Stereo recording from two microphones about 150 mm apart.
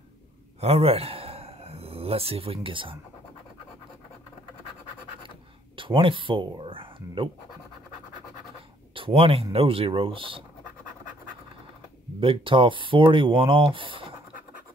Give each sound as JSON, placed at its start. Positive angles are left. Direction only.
{"t": 0.6, "sound": "a sound", "side_deg": -45}
{"t": 5.8, "sound": "speech", "side_deg": -35}
{"t": 8.9, "sound": "speech", "side_deg": -35}
{"t": 12.2, "sound": "speech", "side_deg": -35}